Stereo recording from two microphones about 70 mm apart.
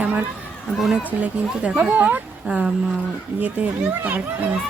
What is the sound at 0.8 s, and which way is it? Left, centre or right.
Speech, centre.